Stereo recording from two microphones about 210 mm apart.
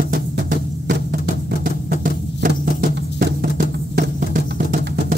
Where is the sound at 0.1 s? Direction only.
40° right (ahead or behind).